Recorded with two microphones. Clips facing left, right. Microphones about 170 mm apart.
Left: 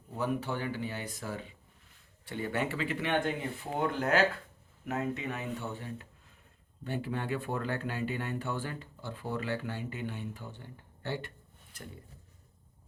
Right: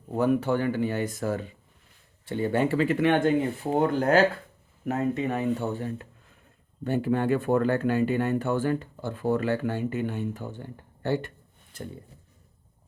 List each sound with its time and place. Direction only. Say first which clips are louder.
0.1 s speech: right 10 dB; 55° right (ahead or behind)
2.2 s speech: right 8 dB; 30° right (ahead or behind); by 11.3 s 45° right (ahead or behind)
11.7 s speech: right 9 dB; 25° right (ahead or behind)